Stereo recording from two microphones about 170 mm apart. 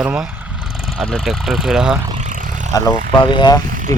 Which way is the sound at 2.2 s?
50° right (ahead or behind).